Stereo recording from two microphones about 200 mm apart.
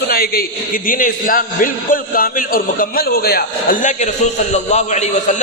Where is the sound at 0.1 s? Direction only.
50° left (ahead or behind).